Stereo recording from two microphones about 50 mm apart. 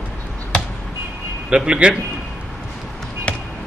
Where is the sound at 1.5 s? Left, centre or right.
Centre.